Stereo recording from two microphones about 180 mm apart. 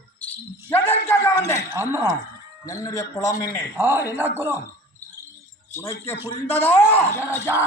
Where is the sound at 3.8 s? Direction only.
10° right (ahead or behind).